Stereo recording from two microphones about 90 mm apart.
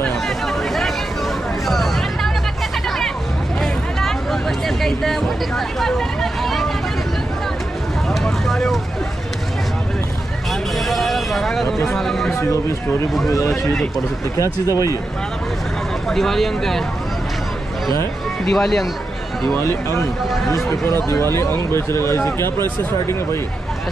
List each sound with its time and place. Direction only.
0.0 s a sound: 5° left (ahead or behind)
1.7 s hubbub: centre (ahead or behind)
3.6 s hubbub: centre (ahead or behind)
5.8 s vehicle: 5° left (ahead or behind)
8.1 s vehicle: centre (ahead or behind)
10.9 s vehicle: centre (ahead or behind)
11.9 s speech: 5° left (ahead or behind)
13.5 s speech: centre (ahead or behind)
16.1 s speech: 5° left (ahead or behind)
18.4 s speech: 5° left (ahead or behind)
19.6 s speech: 30° left (ahead or behind)
21.1 s speech: 30° left (ahead or behind)